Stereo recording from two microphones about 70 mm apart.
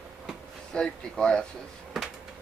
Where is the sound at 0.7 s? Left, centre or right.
Centre.